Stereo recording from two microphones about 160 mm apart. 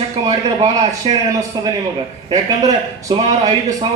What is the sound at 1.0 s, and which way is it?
Speech, 35° right (ahead or behind).